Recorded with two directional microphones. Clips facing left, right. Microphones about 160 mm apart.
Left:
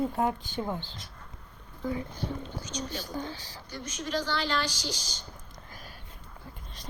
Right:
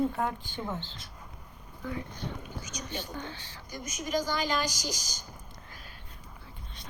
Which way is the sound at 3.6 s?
10° right (ahead or behind).